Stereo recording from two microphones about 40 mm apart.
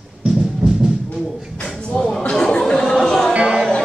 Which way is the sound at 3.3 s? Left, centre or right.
Right.